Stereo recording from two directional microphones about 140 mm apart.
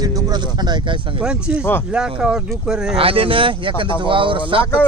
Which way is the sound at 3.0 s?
40° right (ahead or behind).